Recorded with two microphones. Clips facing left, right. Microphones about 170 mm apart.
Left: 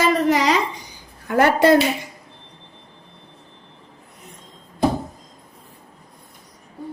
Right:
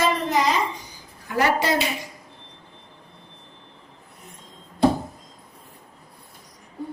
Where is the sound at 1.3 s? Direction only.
55° left (ahead or behind).